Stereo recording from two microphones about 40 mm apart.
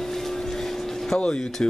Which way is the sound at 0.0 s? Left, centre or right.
Centre.